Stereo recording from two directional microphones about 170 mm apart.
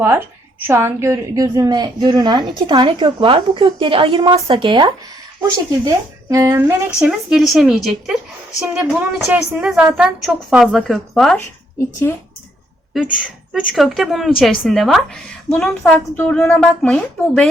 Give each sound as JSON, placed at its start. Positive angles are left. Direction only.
{"t": 0.7, "sound": "a woman's voice", "side_deg": -15}
{"t": 7.3, "sound": "a woman's voice", "side_deg": 0}
{"t": 13.5, "sound": "a woman's voice", "side_deg": 0}